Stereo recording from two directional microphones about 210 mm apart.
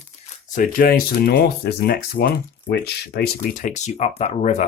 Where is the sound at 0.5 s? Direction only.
40° left (ahead or behind).